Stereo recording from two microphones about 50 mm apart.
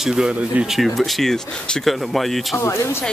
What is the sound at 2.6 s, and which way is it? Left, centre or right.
Speech, left.